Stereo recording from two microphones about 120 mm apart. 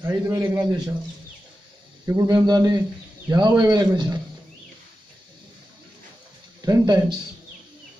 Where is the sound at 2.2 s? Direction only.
35° right (ahead or behind).